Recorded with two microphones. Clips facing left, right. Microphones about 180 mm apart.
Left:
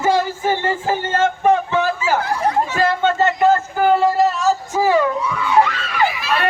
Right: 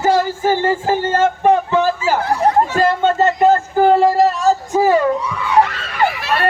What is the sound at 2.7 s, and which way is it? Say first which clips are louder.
A man's voice: right 2 dB; 40° right (ahead or behind).